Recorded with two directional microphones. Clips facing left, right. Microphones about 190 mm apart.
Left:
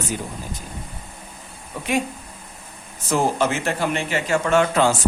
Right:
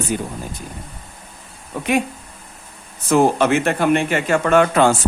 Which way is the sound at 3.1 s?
60° right (ahead or behind).